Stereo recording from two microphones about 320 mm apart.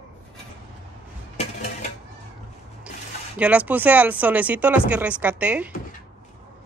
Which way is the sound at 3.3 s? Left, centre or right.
Centre.